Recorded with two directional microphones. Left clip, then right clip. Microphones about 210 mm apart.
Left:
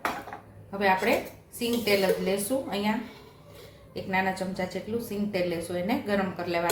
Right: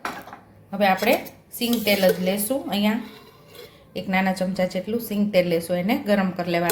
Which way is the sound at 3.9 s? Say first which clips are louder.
Right 4 dB; 45° right (ahead or behind).